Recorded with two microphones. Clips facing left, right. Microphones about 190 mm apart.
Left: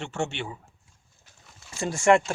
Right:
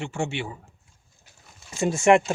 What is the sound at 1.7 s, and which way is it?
Speech, 20° right (ahead or behind).